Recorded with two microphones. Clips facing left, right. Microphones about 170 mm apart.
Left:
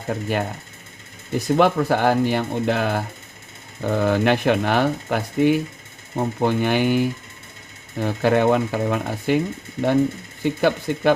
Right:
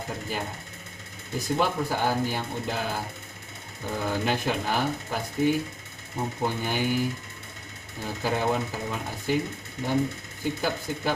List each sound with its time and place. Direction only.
0.1 s speech: 65° left (ahead or behind)
1.5 s speech: 65° left (ahead or behind)
10.4 s speech: 70° left (ahead or behind)